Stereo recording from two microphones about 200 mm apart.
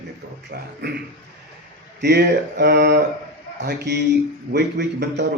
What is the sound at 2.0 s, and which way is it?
Speech, 55° right (ahead or behind).